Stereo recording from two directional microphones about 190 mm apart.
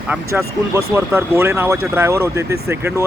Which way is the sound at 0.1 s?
15° right (ahead or behind).